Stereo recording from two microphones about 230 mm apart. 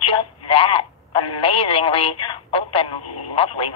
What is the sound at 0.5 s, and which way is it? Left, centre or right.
Speech, left.